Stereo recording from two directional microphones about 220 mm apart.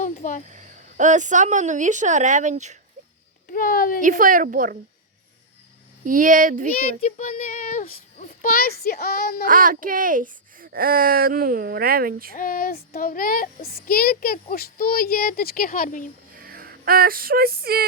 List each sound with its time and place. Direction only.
0.0 s speech: 35° left (ahead or behind)
0.5 s speech: 35° right (ahead or behind)
3.5 s speech: 40° left (ahead or behind)
4.0 s speech: 35° right (ahead or behind)
6.1 s speech: 35° right (ahead or behind)
8.4 s speech: 40° left (ahead or behind)
9.5 s speech: 40° right (ahead or behind)
12.3 s speech: 40° left (ahead or behind)
16.4 s speech: 40° right (ahead or behind)